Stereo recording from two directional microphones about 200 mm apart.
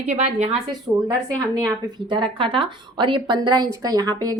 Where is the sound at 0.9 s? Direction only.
15° right (ahead or behind).